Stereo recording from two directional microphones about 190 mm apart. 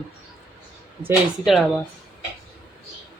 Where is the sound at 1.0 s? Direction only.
Centre (ahead or behind).